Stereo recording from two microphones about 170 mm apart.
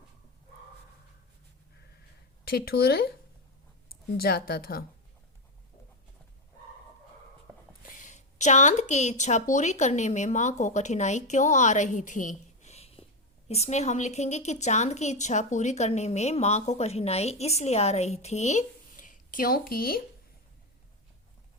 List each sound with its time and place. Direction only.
2.4 s speech: 60° left (ahead or behind)
4.2 s speech: 60° left (ahead or behind)
7.8 s a woman's voice: 50° left (ahead or behind)